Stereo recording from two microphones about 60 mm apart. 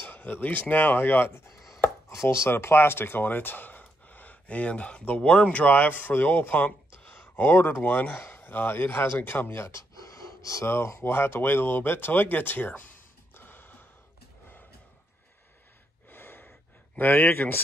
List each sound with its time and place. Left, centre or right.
0.1 s speech: left
1.5 s chopping: centre
2.0 s speech: left
9.6 s gasp: left
10.7 s speech: left
16.1 s gasp: left